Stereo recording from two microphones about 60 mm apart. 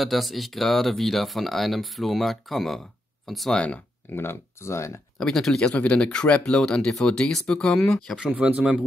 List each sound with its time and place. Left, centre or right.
0.0 s speech: centre
3.5 s speech: left
4.1 s speech: left
5.2 s speech: centre
8.3 s speech: right